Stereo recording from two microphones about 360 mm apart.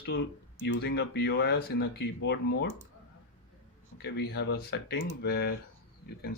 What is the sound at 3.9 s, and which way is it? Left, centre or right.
Speech, left.